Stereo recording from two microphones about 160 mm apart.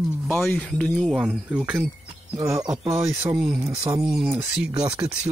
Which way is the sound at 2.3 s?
20° right (ahead or behind).